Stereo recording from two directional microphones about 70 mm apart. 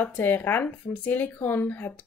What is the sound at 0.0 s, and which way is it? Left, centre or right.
A woman's voice, left.